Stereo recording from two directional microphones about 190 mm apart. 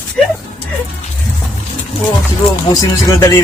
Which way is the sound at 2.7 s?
20° left (ahead or behind).